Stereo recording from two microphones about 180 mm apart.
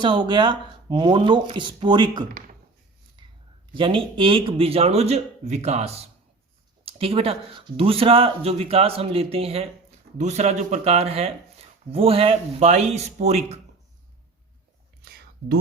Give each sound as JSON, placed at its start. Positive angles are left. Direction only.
{"t": 0.0, "sound": "speech", "side_deg": -25}
{"t": 3.8, "sound": "speech", "side_deg": -30}
{"t": 15.0, "sound": "whispering", "side_deg": -60}